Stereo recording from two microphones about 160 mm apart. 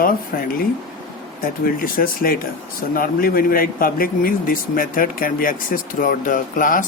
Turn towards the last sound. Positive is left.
turn(degrees=55)  # may be behind; listen again after turning